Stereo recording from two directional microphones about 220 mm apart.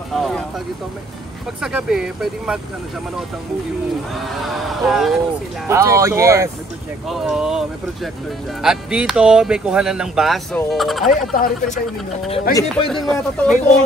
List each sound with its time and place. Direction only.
0.1 s vehicle: centre (ahead or behind)
1.6 s speech: 5° right (ahead or behind)
4.6 s speech: centre (ahead or behind)
5.7 s speech: 15° right (ahead or behind)
7.1 s speech: centre (ahead or behind)
11.3 s speech: 40° left (ahead or behind)
12.9 s speech: centre (ahead or behind)